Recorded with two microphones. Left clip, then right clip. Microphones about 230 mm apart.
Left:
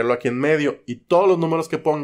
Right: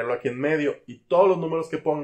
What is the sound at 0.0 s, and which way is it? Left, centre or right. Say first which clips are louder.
Speech: left 5 dB; left.